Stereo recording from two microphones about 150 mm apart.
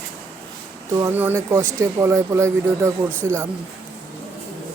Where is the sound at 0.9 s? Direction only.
15° right (ahead or behind).